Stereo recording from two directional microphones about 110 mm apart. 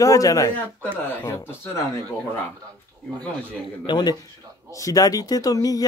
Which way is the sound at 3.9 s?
40° left (ahead or behind).